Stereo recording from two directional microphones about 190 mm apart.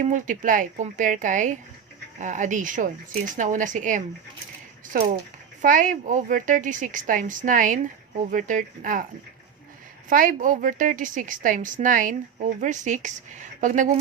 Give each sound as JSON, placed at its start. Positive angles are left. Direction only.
{"t": 0.0, "sound": "a woman's voice", "side_deg": -45}
{"t": 5.6, "sound": "a woman's voice", "side_deg": -45}
{"t": 10.1, "sound": "a woman's voice", "side_deg": -45}